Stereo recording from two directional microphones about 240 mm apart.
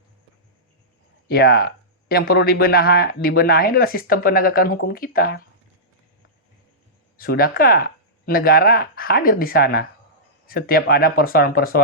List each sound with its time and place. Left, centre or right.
1.3 s speech: left
7.2 s speech: left